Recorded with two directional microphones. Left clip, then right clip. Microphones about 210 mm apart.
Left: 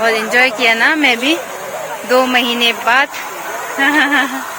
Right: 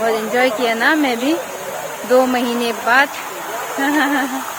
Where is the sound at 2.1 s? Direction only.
25° right (ahead or behind).